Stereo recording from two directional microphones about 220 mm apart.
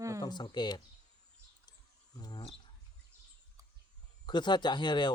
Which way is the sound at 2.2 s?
20° left (ahead or behind).